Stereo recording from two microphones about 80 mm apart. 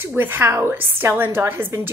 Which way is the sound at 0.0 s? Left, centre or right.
Right.